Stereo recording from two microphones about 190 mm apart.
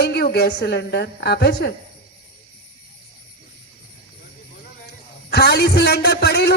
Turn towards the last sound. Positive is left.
turn(degrees=60)  # may be behind; listen again after turning